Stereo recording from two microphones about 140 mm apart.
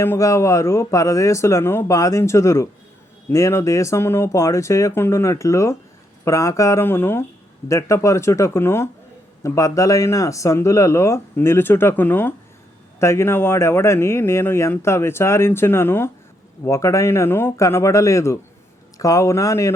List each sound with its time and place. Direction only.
0.0 s speech: 20° left (ahead or behind)